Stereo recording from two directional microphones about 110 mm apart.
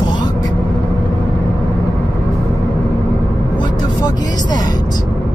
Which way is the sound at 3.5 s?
45° left (ahead or behind).